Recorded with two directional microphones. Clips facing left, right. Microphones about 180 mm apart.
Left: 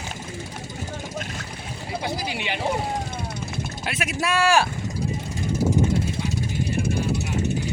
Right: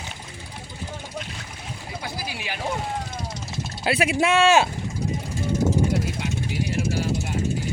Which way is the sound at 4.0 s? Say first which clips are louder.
Right 3 dB; 25° right (ahead or behind).